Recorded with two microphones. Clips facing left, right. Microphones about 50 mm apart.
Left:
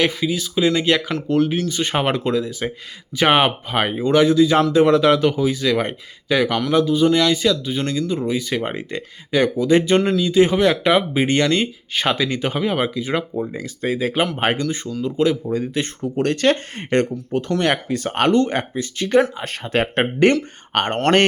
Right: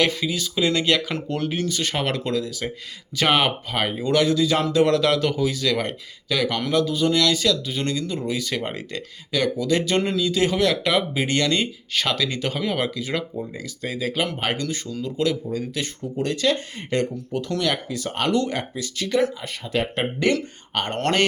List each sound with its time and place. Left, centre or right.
0.0 s speech: centre
1.9 s speech: left
13.4 s speech: left
13.9 s speech: left
15.5 s speech: left
16.0 s speech: left
19.4 s speech: left